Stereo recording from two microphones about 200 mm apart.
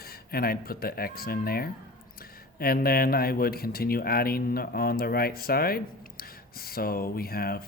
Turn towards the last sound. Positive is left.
turn(degrees=50)  # may be behind; listen again after turning